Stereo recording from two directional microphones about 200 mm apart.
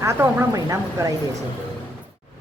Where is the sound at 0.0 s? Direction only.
10° right (ahead or behind).